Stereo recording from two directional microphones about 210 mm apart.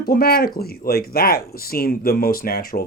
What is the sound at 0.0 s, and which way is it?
Speech, 45° left (ahead or behind).